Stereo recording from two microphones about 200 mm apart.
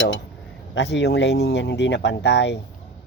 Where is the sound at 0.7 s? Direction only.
60° left (ahead or behind).